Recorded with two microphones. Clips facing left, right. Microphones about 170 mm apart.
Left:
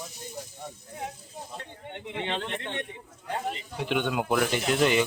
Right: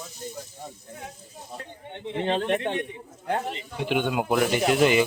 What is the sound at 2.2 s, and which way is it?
Speech, 40° right (ahead or behind).